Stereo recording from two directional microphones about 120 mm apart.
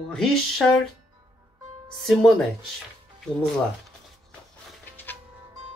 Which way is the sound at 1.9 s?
Centre (ahead or behind).